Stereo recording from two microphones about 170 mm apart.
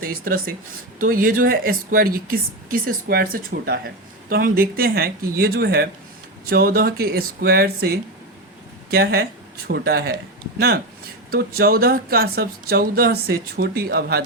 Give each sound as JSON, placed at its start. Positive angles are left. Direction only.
{"t": 0.1, "sound": "speech", "side_deg": -60}
{"t": 11.3, "sound": "speech", "side_deg": -65}